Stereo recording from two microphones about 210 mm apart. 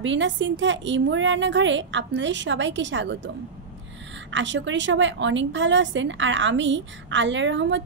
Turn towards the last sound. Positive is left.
turn(degrees=-60)  # may be behind; listen again after turning